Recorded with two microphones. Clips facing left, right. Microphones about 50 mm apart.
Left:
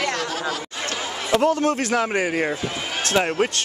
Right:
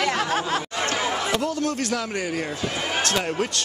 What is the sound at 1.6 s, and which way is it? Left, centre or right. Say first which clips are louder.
Speech: left 5 dB; left.